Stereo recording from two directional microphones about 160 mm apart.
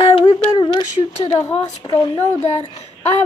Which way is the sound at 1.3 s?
15° left (ahead or behind).